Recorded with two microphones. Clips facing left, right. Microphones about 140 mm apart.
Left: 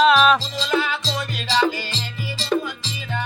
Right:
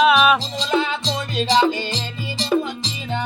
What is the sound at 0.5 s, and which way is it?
Music, 20° right (ahead or behind).